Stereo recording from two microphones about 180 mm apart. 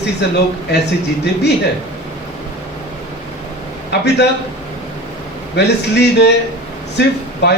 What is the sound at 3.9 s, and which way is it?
Speech, 70° left (ahead or behind).